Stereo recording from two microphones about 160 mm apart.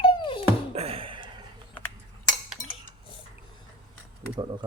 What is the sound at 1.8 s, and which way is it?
Cutlery, 10° left (ahead or behind).